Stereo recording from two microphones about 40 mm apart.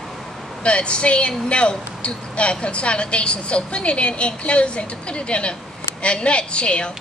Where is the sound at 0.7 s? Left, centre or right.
Left.